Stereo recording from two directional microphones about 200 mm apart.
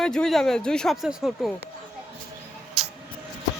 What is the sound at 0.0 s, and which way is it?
Speech, 5° left (ahead or behind).